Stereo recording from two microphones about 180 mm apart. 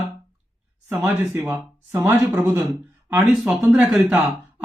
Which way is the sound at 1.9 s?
15° right (ahead or behind).